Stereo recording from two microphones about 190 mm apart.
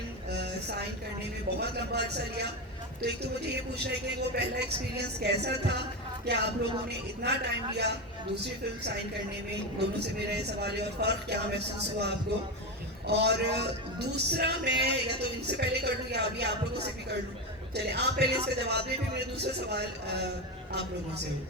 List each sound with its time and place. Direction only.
0.3 s a sound: 60° right (ahead or behind)
1.5 s speech: 60° right (ahead or behind)
10.2 s speech: 60° right (ahead or behind)
13.1 s speech: 60° right (ahead or behind)